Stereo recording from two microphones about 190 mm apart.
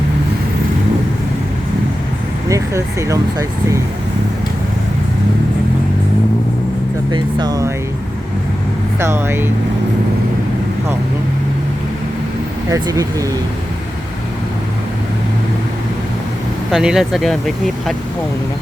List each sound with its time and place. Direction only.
2.5 s speech: 15° right (ahead or behind)
7.1 s speech: 20° right (ahead or behind)
9.0 s speech: 15° right (ahead or behind)
12.7 s speech: 15° right (ahead or behind)
16.7 s speech: centre (ahead or behind)